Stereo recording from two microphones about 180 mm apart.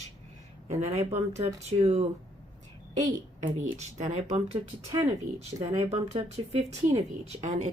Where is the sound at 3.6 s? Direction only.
40° right (ahead or behind).